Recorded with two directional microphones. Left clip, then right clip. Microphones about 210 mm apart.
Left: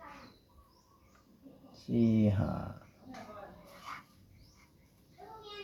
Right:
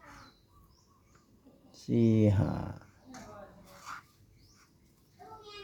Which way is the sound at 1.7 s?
55° right (ahead or behind).